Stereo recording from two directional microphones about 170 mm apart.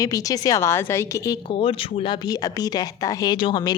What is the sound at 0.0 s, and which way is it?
Speech, 20° left (ahead or behind).